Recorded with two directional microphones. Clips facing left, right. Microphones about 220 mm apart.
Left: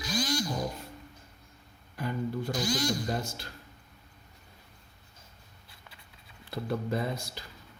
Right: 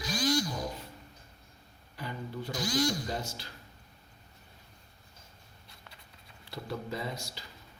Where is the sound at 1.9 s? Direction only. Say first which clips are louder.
Left 7 dB; 50° left (ahead or behind).